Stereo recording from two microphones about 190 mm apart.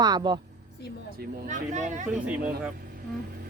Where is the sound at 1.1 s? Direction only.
55° right (ahead or behind).